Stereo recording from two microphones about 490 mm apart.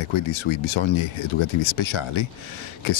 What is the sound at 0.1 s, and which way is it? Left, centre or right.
Speech, left.